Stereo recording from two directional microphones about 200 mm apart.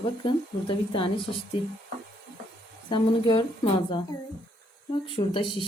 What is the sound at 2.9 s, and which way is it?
A woman's voice, 25° left (ahead or behind).